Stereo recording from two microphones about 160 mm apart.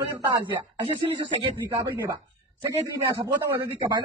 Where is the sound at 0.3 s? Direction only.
30° right (ahead or behind).